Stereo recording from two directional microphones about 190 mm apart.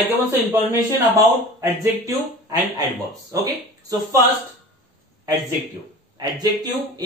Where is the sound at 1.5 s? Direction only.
20° right (ahead or behind).